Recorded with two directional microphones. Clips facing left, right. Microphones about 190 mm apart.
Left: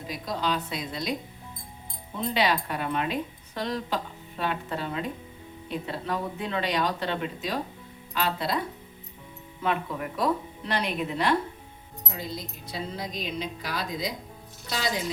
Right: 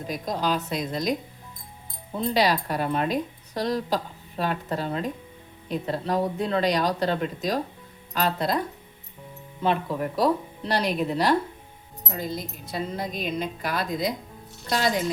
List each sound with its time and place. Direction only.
0.1 s a woman's voice: 45° right (ahead or behind)
2.1 s a woman's voice: 40° right (ahead or behind)
9.6 s speech: 35° right (ahead or behind)
12.1 s a woman's voice: 50° right (ahead or behind)